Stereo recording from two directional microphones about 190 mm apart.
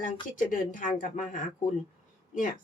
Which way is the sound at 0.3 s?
45° left (ahead or behind).